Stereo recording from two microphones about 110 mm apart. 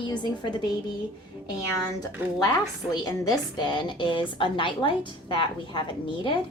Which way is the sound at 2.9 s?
35° left (ahead or behind).